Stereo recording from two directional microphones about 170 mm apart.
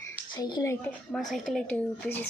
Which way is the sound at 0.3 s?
25° left (ahead or behind).